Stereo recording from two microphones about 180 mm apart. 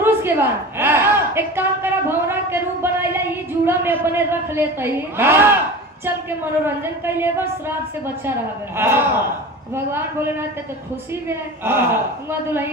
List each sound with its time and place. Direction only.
0.0 s a sound: 10° right (ahead or behind)
3.7 s a man's voice: 10° right (ahead or behind)
8.7 s a man's voice: 10° right (ahead or behind)